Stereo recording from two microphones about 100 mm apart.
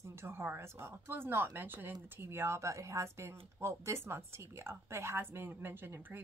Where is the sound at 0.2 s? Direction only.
25° right (ahead or behind).